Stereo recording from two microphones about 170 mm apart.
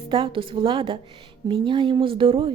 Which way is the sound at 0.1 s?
30° right (ahead or behind).